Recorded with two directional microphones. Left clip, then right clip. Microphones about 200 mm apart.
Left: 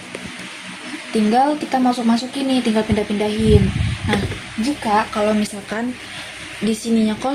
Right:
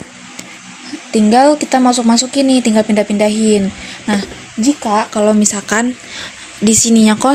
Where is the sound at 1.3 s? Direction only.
45° right (ahead or behind).